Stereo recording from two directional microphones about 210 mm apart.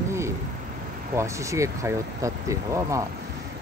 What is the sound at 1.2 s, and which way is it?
Speech, 15° right (ahead or behind).